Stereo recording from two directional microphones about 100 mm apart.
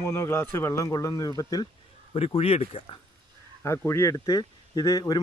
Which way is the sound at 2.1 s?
85° left.